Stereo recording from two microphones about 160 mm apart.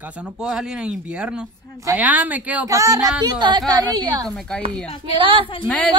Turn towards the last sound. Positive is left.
turn(degrees=5)  # may be behind; listen again after turning